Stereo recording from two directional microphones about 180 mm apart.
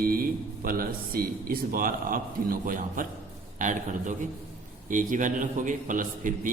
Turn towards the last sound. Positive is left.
turn(degrees=-45)  # may be behind; listen again after turning